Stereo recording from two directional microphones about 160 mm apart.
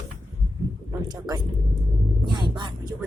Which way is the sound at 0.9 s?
25° right (ahead or behind).